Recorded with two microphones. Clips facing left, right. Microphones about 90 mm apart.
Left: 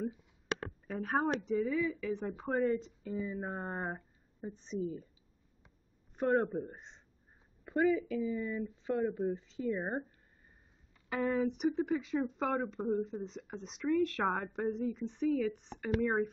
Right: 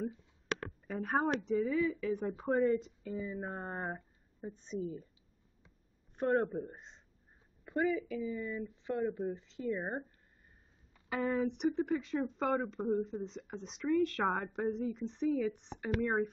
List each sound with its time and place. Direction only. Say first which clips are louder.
0.8 s a woman's voice: even; centre (ahead or behind)
6.1 s a woman's voice: left 1 dB; 5° left (ahead or behind)
7.6 s a woman's voice: left 3 dB; 25° left (ahead or behind)
9.2 s a woman's voice: left 3 dB; centre (ahead or behind)
11.1 s a woman's voice: left 1 dB; centre (ahead or behind)